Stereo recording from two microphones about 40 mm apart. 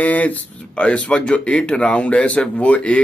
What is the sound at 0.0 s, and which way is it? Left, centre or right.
Speech, left.